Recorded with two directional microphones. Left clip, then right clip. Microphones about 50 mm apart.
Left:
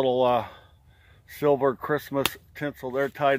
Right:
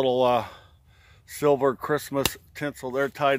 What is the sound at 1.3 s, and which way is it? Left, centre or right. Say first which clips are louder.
Speech: right 1 dB; centre.